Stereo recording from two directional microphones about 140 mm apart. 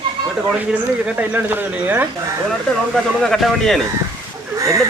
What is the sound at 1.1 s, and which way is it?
Speech, 10° right (ahead or behind).